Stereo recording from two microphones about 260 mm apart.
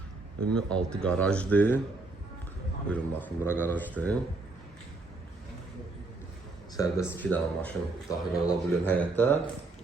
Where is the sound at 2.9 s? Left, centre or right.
Centre.